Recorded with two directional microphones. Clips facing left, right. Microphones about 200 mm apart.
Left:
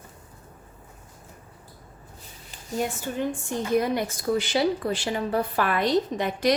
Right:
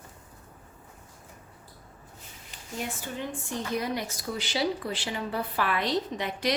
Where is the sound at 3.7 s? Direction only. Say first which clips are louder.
Left 9 dB; 50° left (ahead or behind).